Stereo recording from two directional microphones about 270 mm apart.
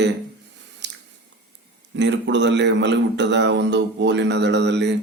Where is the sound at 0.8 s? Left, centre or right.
Right.